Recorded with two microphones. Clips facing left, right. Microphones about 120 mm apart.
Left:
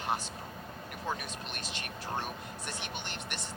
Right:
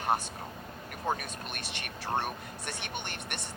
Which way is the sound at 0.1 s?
55° right (ahead or behind).